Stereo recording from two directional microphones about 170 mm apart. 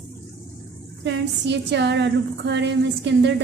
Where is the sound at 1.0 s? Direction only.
90° right.